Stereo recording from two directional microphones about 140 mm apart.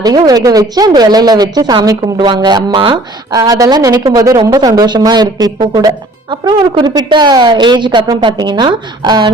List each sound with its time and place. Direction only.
0.0 s a woman's voice: 30° right (ahead or behind)